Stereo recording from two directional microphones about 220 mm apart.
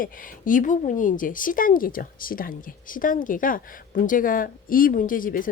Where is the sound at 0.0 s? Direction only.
40° left (ahead or behind).